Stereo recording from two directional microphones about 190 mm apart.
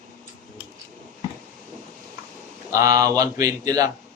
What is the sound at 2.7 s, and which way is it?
Speech, 20° right (ahead or behind).